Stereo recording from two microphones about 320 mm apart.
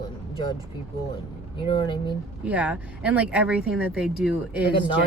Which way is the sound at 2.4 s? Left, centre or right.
Centre.